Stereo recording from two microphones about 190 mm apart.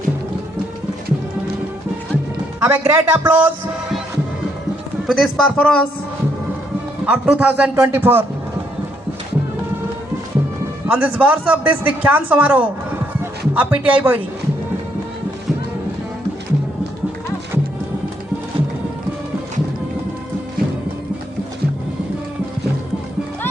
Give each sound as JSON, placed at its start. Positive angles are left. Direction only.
{"t": 2.6, "sound": "a man's voice", "side_deg": -10}
{"t": 5.0, "sound": "speech", "side_deg": 0}
{"t": 7.0, "sound": "a man's voice", "side_deg": -10}
{"t": 10.8, "sound": "a man's voice", "side_deg": -10}